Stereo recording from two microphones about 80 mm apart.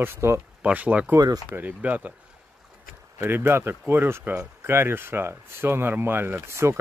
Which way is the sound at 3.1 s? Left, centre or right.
Right.